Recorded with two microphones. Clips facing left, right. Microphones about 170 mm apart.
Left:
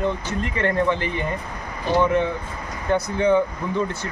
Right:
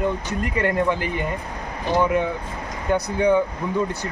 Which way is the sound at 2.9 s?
15° right (ahead or behind).